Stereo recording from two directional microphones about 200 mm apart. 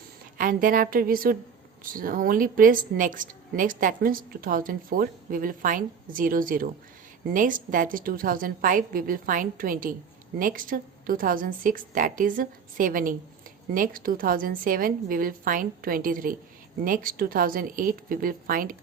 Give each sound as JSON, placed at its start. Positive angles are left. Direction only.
{"t": 0.3, "sound": "a woman's voice", "side_deg": -45}